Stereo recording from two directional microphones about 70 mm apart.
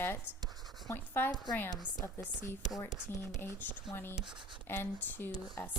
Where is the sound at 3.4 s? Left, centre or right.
Left.